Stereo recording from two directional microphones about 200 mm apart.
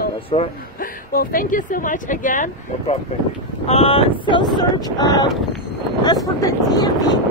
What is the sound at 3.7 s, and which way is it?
Speech, 30° left (ahead or behind).